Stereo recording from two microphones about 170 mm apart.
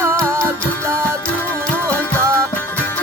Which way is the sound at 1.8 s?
15° right (ahead or behind).